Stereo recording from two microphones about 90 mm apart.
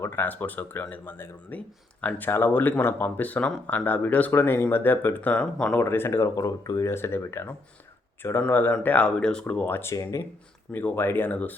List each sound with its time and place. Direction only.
0.0 s speech: 25° left (ahead or behind)
5.8 s speech: 30° left (ahead or behind)
6.3 s speech: 45° left (ahead or behind)
6.9 s speech: 30° left (ahead or behind)
9.9 s speech: 40° left (ahead or behind)
10.7 s speech: 25° left (ahead or behind)